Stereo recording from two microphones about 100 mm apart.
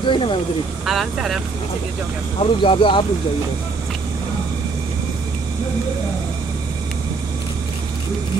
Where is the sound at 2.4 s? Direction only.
60° left (ahead or behind).